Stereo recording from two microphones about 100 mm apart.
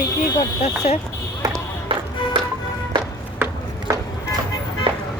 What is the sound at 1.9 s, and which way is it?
Music, 65° right (ahead or behind).